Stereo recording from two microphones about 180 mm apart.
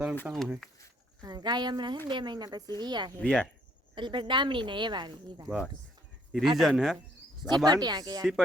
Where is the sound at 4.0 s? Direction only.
25° right (ahead or behind).